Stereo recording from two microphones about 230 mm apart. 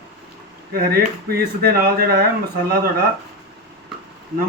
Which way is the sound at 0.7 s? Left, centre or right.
Right.